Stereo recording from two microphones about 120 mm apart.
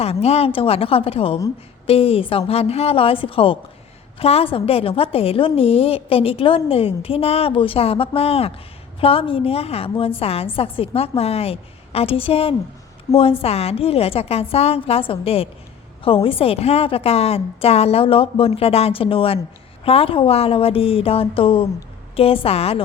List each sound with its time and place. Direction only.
0.0 s a woman's voice: 60° left (ahead or behind)